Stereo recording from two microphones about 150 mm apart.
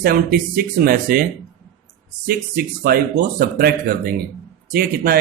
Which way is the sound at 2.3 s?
85° right.